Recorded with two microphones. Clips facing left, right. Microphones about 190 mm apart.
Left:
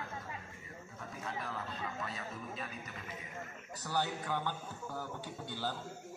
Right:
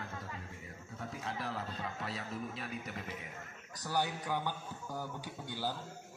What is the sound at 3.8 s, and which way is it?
A man's voice, 15° right (ahead or behind).